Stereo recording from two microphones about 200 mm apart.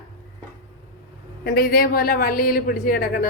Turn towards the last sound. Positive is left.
turn(degrees=45)  # may be behind; listen again after turning